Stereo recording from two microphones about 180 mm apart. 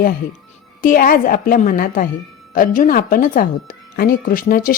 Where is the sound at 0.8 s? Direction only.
50° left (ahead or behind).